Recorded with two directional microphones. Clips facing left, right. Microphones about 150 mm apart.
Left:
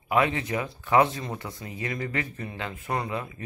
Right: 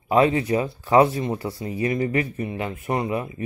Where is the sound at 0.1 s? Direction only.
30° right (ahead or behind).